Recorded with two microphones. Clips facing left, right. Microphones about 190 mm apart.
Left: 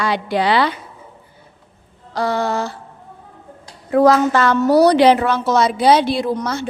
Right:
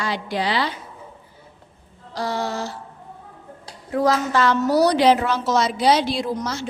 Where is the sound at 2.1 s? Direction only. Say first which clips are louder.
Left 6 dB; 60° left (ahead or behind).